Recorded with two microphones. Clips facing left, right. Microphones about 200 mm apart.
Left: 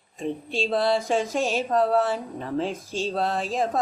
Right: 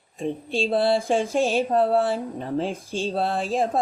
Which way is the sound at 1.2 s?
30° right (ahead or behind).